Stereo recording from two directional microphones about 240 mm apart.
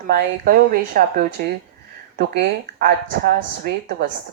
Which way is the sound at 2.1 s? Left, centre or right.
Right.